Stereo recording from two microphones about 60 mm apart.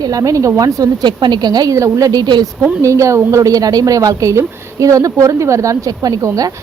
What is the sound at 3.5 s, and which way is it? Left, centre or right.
Speech, right.